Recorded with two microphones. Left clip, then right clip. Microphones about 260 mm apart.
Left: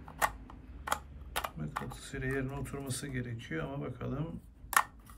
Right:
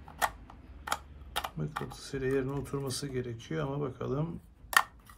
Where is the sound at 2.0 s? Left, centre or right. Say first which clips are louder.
Right 7 dB; centre.